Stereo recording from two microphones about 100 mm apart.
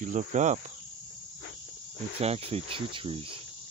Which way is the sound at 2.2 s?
85° right.